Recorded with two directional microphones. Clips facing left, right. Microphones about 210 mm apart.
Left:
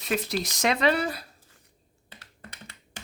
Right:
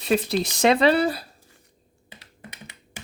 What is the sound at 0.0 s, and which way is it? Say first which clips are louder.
Speech: right 6 dB; 30° right (ahead or behind).